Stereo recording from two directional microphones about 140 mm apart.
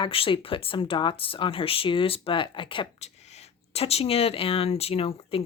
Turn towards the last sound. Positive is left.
turn(degrees=40)  # may be behind; listen again after turning